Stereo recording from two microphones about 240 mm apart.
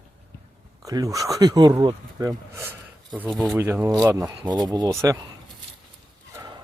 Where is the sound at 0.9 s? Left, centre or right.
Centre.